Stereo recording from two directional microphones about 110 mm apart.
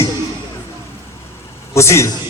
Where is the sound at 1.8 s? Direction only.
25° left (ahead or behind).